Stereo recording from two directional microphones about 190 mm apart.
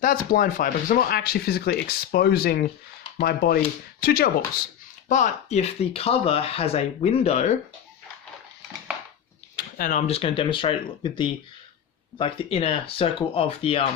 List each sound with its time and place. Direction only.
0.0 s speech: 45° left (ahead or behind)
5.0 s speech: 40° left (ahead or behind)
9.7 s speech: 45° left (ahead or behind)
10.1 s speech: 30° left (ahead or behind)